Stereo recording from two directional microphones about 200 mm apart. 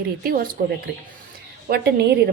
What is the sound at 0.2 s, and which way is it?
Speech, 45° right (ahead or behind).